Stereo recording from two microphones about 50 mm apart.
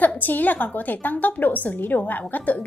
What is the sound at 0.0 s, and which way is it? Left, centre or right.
A woman's voice, left.